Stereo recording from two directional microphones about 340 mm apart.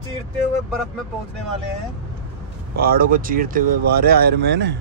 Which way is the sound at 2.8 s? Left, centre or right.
Right.